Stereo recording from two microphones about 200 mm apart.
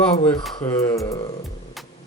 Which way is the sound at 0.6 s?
15° left (ahead or behind).